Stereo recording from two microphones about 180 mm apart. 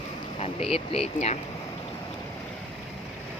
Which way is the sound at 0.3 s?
35° left (ahead or behind).